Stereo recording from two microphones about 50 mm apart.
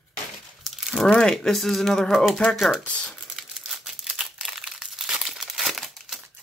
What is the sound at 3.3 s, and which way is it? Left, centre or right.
Crumpling, centre.